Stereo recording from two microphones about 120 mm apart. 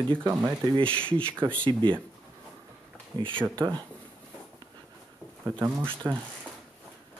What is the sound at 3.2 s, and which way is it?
Speech, 45° right (ahead or behind).